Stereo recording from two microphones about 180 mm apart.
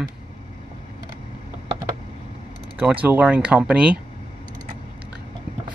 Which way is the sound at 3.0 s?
10° right (ahead or behind).